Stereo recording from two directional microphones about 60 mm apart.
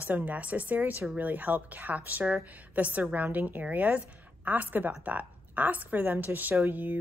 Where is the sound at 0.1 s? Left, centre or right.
Right.